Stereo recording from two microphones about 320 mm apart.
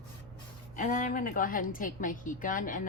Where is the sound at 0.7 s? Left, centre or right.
Left.